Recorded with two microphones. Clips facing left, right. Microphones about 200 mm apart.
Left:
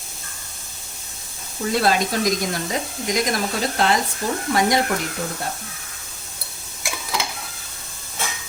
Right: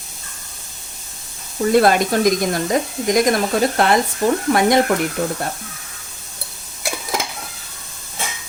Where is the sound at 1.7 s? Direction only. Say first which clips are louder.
Right 6 dB; 55° right (ahead or behind).